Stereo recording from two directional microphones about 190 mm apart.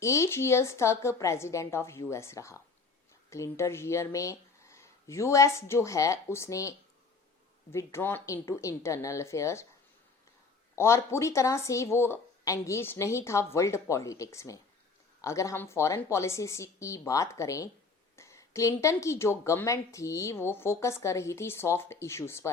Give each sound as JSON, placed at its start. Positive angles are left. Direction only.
{"t": 0.0, "sound": "a woman's voice", "side_deg": 15}
{"t": 10.8, "sound": "a woman's voice", "side_deg": 15}